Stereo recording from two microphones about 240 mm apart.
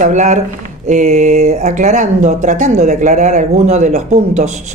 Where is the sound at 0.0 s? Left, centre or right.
Right.